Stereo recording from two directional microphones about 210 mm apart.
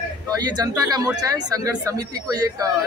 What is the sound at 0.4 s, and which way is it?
Speech, 20° right (ahead or behind).